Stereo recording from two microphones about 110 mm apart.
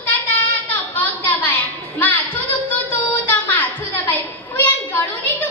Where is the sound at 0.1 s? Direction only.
15° left (ahead or behind).